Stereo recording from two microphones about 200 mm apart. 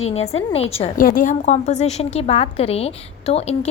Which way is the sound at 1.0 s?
45° left (ahead or behind).